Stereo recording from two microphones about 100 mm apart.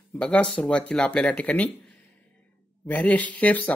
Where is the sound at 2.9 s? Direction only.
15° left (ahead or behind).